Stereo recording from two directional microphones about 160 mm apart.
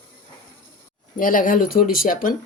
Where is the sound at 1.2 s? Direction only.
60° left (ahead or behind).